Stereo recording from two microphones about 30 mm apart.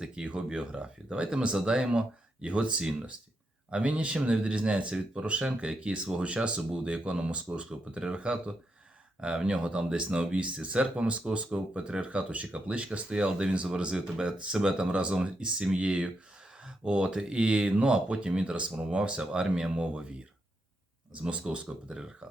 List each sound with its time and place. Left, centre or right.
0.2 s speech: right
6.0 s speech: right
6.2 s speech: right
10.3 s speech: right
12.1 s speech: right
13.1 s speech: right
17.7 s speech: right
19.7 s speech: right
21.8 s speech: right